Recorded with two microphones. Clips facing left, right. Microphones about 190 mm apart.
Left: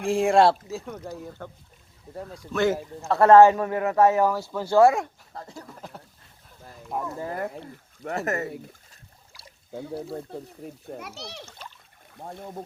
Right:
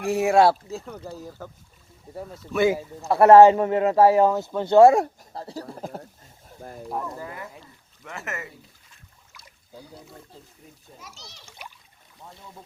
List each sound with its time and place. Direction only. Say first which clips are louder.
0.0 s speech: right 1 dB; 5° right (ahead or behind); by 5.8 s 35° right (ahead or behind)
5.8 s a sound: right 7 dB; 45° right (ahead or behind)
6.6 s speech: right 8 dB; 45° right (ahead or behind)
6.8 s speech: even; centre (ahead or behind)
7.3 s a child's voice: left 8 dB; 60° left (ahead or behind)
8.0 s speech: left 8 dB; 35° left (ahead or behind)
9.3 s rowboat: left 8 dB; 30° left (ahead or behind)
10.8 s a child's voice: left 8 dB; 60° left (ahead or behind)
11.4 s splash: even; 10° right (ahead or behind)
12.1 s speech: left 9 dB; 55° left (ahead or behind)